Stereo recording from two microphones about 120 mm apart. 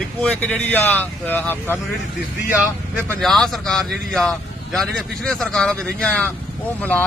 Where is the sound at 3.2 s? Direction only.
5° left (ahead or behind).